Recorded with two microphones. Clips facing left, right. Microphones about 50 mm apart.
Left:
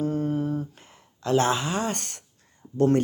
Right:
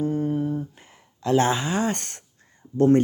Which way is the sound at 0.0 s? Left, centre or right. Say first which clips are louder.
Right 2 dB; centre.